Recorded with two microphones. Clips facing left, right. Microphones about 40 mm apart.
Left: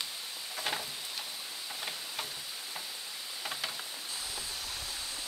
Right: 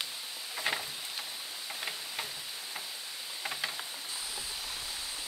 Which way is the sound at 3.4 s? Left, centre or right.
Centre.